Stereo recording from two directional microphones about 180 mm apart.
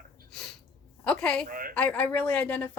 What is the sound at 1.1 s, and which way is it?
Speech, 5° left (ahead or behind).